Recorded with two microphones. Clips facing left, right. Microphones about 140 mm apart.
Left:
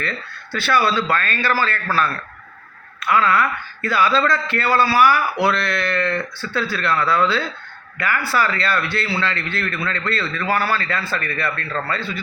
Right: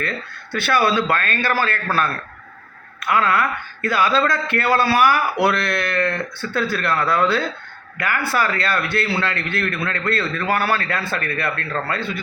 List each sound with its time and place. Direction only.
0.5 s a man's voice: 50° right (ahead or behind)